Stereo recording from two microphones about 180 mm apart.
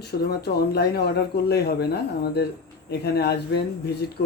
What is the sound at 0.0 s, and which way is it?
Speech, 60° left (ahead or behind).